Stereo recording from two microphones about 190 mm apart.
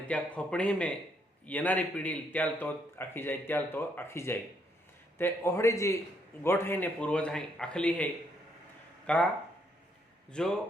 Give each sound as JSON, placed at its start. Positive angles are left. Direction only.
{"t": 0.1, "sound": "a man's voice", "side_deg": 5}
{"t": 10.3, "sound": "speech", "side_deg": 5}